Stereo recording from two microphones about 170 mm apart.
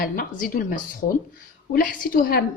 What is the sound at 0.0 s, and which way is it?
Speech, 55° left (ahead or behind).